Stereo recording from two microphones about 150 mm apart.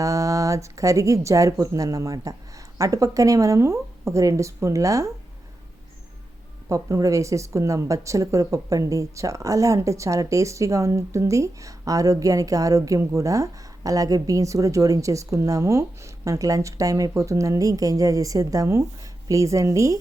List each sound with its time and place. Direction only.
0.0 s a woman's voice: 20° right (ahead or behind)
6.7 s a woman's voice: 20° right (ahead or behind)